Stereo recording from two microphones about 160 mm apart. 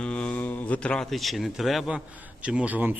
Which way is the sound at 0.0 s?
5° left (ahead or behind).